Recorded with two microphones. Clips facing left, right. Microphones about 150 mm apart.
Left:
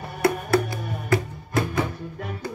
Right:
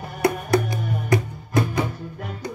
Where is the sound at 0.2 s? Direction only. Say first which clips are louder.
Right 1 dB; 20° right (ahead or behind).